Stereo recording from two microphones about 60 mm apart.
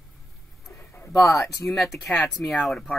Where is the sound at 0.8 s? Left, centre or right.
Left.